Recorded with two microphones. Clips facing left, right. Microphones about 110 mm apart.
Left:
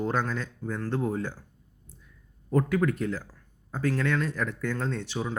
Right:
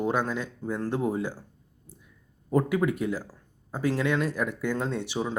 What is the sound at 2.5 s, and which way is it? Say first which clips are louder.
Speech: right 1 dB; 10° right (ahead or behind).